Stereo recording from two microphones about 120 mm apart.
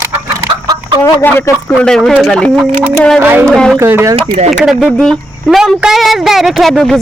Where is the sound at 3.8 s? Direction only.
20° right (ahead or behind).